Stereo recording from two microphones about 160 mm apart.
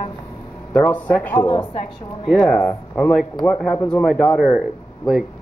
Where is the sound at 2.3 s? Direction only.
5° left (ahead or behind).